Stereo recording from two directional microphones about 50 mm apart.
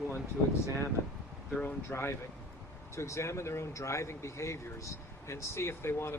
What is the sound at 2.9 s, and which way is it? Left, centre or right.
Speech, left.